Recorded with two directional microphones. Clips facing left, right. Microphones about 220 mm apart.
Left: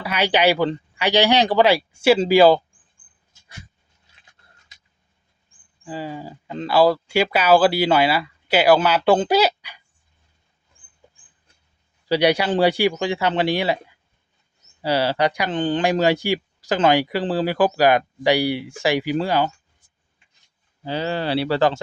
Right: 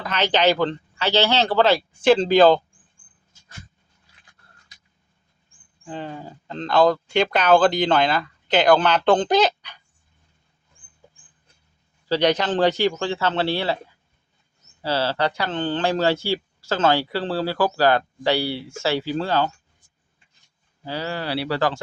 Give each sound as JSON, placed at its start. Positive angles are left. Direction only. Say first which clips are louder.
{"t": 0.0, "sound": "speech", "louder": "left 1 dB", "side_deg": 10}
{"t": 5.8, "sound": "speech", "louder": "left 2 dB", "side_deg": 5}
{"t": 12.0, "sound": "speech", "louder": "left 2 dB", "side_deg": 10}
{"t": 14.8, "sound": "speech", "louder": "left 3 dB", "side_deg": 15}
{"t": 20.8, "sound": "speech", "louder": "left 4 dB", "side_deg": 20}